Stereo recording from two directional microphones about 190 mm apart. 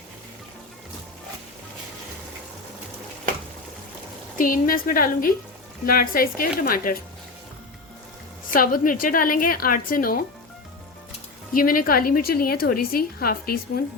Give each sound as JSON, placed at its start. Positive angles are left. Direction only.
{"t": 4.4, "sound": "a woman's voice", "side_deg": 45}
{"t": 8.4, "sound": "a woman's voice", "side_deg": 45}
{"t": 11.5, "sound": "a woman's voice", "side_deg": 45}